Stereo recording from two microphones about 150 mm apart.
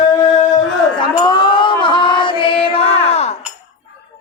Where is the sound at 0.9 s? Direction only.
30° left (ahead or behind).